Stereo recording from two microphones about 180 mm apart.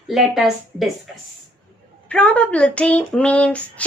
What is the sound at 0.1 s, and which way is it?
Speech, centre (ahead or behind).